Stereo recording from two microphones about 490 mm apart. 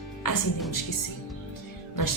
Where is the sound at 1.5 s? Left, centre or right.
Left.